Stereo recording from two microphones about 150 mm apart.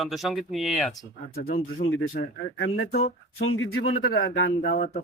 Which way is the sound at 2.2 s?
90° left.